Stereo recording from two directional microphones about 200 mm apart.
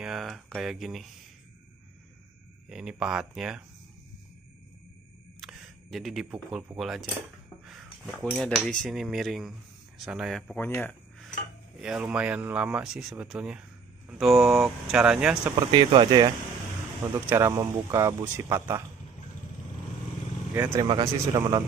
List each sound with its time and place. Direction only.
0.0 s speech: centre (ahead or behind)
2.7 s speech: 5° right (ahead or behind)
5.4 s speech: centre (ahead or behind)
7.6 s a sound: centre (ahead or behind)
8.4 s speech: 5° left (ahead or behind)
9.9 s cutlery: 5° right (ahead or behind)
11.8 s speech: 5° right (ahead or behind)
15.7 s speech: 25° right (ahead or behind)
20.5 s speech: 10° right (ahead or behind)